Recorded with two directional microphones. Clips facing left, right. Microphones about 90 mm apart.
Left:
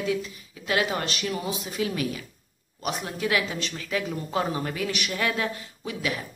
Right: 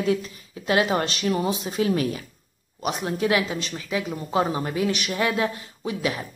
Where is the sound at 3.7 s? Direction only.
15° right (ahead or behind).